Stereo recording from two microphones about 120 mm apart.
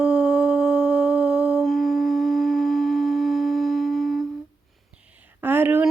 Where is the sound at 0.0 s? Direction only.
15° right (ahead or behind).